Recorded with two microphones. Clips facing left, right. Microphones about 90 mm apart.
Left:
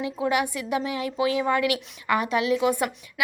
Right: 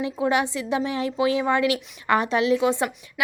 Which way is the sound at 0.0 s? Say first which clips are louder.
Right 2 dB; 30° right (ahead or behind).